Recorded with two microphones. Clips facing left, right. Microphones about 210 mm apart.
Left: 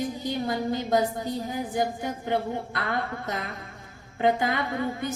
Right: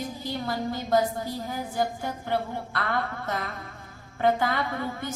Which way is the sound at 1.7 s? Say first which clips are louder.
Even; 15° left (ahead or behind).